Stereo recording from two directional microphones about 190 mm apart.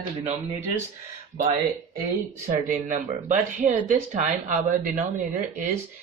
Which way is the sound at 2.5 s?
40° right (ahead or behind).